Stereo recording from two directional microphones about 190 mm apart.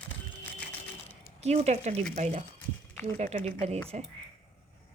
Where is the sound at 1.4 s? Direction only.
35° right (ahead or behind).